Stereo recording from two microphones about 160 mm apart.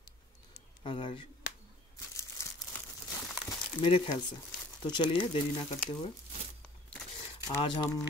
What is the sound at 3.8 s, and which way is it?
Speech, 35° left (ahead or behind).